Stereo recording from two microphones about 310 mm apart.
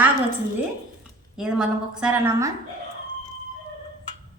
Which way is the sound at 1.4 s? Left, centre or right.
Centre.